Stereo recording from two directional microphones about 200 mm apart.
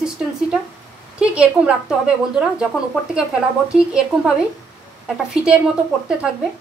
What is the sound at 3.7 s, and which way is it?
A woman's voice, 5° right (ahead or behind).